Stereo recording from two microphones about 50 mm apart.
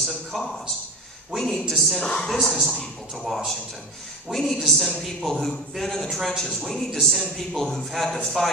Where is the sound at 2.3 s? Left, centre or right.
Centre.